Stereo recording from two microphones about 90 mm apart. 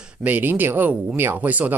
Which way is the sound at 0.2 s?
20° right (ahead or behind).